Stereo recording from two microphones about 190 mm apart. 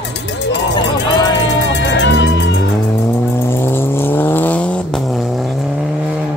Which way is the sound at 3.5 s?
10° left (ahead or behind).